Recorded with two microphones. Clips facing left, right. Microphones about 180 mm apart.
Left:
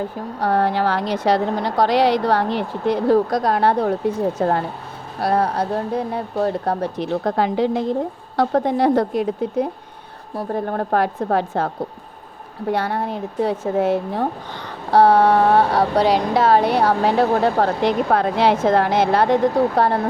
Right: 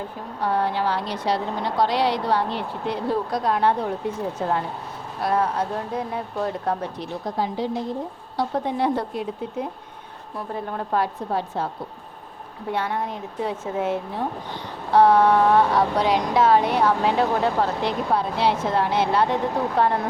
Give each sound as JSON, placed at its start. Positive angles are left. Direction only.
{"t": 0.3, "sound": "speech", "side_deg": 40}
{"t": 0.6, "sound": "speech", "side_deg": 90}
{"t": 2.9, "sound": "speech", "side_deg": 40}
{"t": 7.1, "sound": "a woman's voice", "side_deg": 70}
{"t": 8.8, "sound": "speech", "side_deg": 90}
{"t": 10.3, "sound": "a woman's voice", "side_deg": 50}
{"t": 12.7, "sound": "speech", "side_deg": 35}
{"t": 17.6, "sound": "speech", "side_deg": 65}
{"t": 19.1, "sound": "speech", "side_deg": 40}